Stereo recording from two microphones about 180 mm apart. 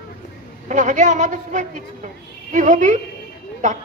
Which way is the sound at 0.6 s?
40° right (ahead or behind).